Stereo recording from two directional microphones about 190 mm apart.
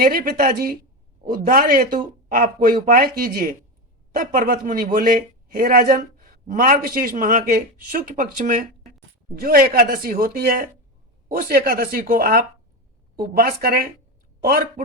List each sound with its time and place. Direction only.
0.0 s a man's voice: 50° right (ahead or behind)